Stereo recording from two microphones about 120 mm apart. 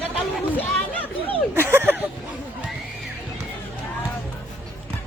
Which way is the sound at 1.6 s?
20° right (ahead or behind).